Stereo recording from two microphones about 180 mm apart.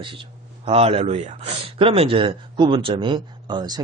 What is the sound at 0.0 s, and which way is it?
Speech, 30° right (ahead or behind).